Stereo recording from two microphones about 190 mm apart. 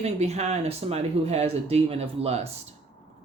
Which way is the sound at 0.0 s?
35° right (ahead or behind).